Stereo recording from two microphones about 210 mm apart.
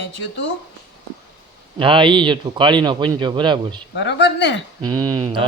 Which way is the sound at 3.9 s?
55° left (ahead or behind).